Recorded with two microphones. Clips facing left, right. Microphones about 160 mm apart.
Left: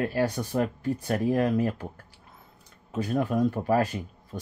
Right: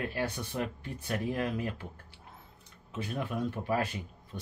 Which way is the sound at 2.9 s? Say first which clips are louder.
Left 9 dB; 40° left (ahead or behind).